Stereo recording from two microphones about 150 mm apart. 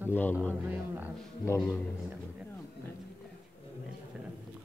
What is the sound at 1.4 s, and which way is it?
Speech, 20° left (ahead or behind).